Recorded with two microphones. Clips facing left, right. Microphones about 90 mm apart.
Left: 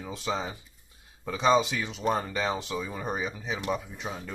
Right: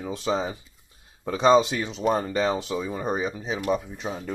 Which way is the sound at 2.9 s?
15° right (ahead or behind).